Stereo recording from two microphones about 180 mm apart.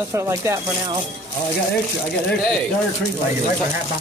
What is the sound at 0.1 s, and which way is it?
Speech, 15° right (ahead or behind).